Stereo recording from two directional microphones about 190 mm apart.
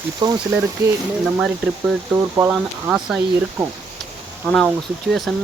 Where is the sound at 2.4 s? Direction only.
5° right (ahead or behind).